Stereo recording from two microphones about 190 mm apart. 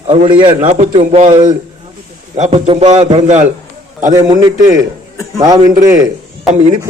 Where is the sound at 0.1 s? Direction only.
30° right (ahead or behind).